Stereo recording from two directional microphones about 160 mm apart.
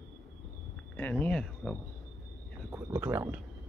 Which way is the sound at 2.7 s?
15° right (ahead or behind).